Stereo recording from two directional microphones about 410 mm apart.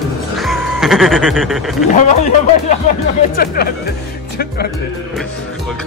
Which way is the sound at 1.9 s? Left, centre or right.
Centre.